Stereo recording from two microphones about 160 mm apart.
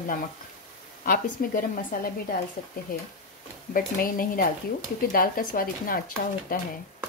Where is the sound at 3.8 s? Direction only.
60° left (ahead or behind).